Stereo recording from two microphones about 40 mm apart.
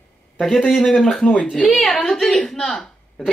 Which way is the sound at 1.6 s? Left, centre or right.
Centre.